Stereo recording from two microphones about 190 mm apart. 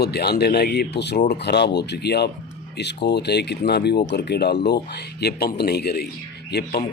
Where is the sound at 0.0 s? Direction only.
60° left (ahead or behind).